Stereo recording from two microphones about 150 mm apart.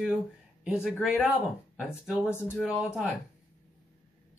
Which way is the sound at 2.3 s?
15° left (ahead or behind).